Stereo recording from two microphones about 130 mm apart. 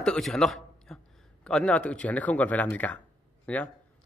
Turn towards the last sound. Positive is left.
turn(degrees=10)  # may be behind; listen again after turning